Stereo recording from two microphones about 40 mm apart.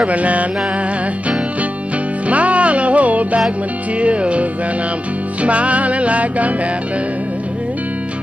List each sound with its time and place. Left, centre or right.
0.0 s music: right
2.2 s music: right